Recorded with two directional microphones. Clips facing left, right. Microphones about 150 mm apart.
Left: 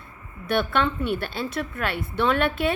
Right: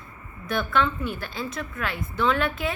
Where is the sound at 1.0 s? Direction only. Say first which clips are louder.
Left 5 dB; 70° left (ahead or behind).